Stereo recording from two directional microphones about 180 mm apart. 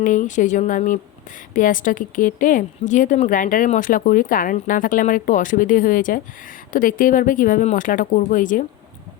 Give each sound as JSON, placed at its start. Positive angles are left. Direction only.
{"t": 0.0, "sound": "speech", "side_deg": 45}